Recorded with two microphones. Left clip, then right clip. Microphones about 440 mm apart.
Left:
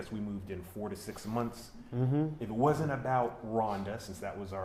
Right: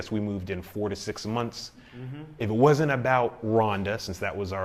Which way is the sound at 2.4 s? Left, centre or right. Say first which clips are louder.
Right 11 dB; right.